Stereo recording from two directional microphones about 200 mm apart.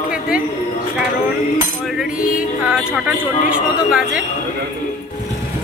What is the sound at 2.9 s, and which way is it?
A man's voice, 5° right (ahead or behind).